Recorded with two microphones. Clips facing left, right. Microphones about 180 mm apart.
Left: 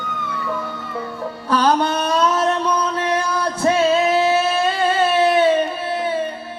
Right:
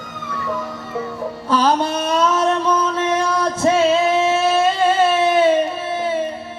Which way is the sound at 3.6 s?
25° right (ahead or behind).